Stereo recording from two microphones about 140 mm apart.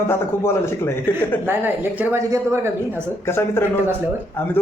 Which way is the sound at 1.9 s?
20° right (ahead or behind).